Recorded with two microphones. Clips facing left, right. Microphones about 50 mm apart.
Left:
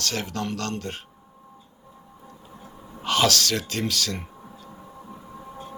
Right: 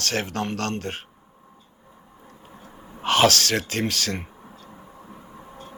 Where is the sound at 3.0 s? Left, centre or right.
Right.